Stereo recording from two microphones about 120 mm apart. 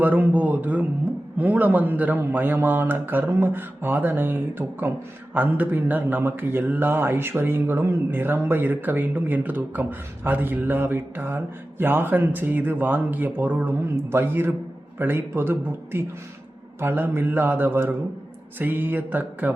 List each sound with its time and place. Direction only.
0.0 s a man's voice: 15° right (ahead or behind)